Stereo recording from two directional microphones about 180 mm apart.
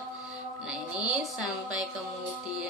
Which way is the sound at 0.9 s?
5° right (ahead or behind).